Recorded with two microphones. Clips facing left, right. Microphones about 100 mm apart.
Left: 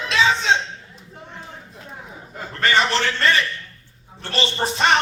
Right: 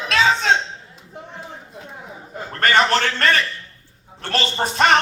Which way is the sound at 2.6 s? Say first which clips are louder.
Right 2 dB; 50° right (ahead or behind).